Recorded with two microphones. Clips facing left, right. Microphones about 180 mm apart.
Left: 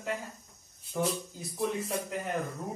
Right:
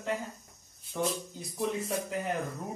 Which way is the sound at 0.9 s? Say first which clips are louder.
Left 1 dB; 5° left (ahead or behind).